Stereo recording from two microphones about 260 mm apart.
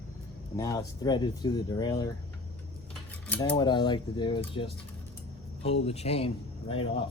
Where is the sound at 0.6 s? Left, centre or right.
Centre.